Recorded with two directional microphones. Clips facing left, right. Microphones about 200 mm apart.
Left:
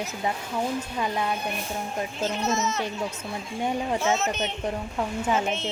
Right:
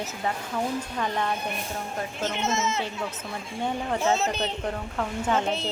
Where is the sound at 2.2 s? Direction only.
25° right (ahead or behind).